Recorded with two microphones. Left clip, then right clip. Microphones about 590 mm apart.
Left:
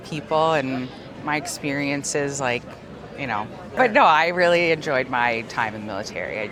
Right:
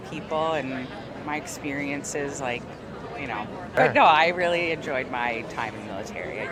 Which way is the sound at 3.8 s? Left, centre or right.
Left.